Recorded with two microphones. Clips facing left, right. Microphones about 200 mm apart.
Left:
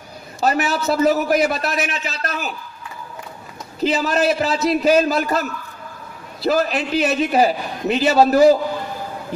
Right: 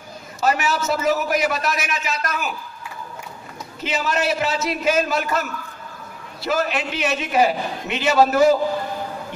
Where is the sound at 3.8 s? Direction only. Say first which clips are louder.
Left 5 dB; 35° left (ahead or behind).